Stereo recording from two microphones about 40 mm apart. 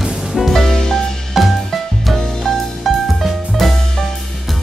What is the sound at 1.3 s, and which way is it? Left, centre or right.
Music, centre.